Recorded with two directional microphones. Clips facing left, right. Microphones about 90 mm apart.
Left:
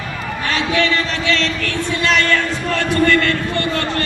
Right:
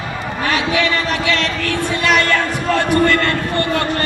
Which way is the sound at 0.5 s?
15° right (ahead or behind).